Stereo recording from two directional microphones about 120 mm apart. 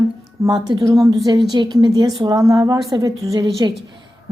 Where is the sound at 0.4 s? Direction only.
35° right (ahead or behind).